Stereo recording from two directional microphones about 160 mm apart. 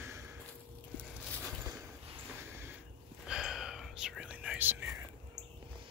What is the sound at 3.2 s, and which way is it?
Whispering, 5° right (ahead or behind).